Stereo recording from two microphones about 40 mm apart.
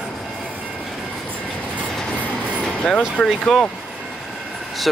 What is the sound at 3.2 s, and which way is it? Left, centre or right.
Speech, centre.